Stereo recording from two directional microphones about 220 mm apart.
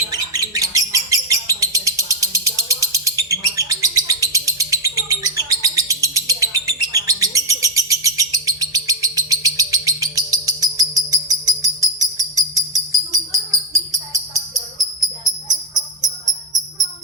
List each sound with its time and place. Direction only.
0.1 s bird: 15° right (ahead or behind)